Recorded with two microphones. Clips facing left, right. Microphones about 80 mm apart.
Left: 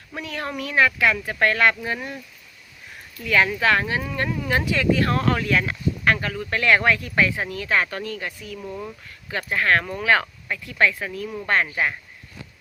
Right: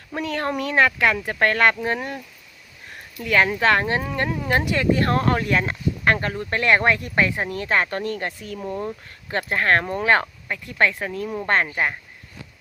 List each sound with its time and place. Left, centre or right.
0.1 s speech: right
1.0 s speech: right
3.2 s speech: right
3.8 s speech: right
4.4 s speech: right
8.0 s speech: right
8.5 s speech: right